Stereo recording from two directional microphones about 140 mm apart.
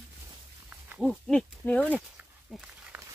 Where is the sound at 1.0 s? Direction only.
5° left (ahead or behind).